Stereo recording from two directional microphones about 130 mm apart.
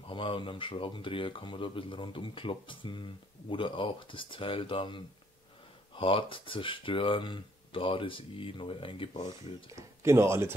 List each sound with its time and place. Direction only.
0.1 s speech: 40° left (ahead or behind)
9.8 s speech: 20° right (ahead or behind)